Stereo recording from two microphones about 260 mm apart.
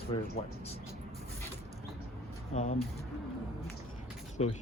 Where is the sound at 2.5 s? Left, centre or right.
Left.